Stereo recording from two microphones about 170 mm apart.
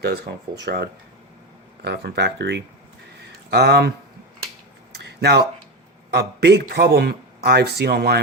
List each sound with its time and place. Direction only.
0.0 s a man's voice: 70° right (ahead or behind)
4.9 s a sound: 70° right (ahead or behind)
6.1 s a man's voice: 75° right (ahead or behind)